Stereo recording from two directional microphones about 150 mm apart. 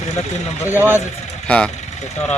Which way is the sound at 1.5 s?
5° left (ahead or behind).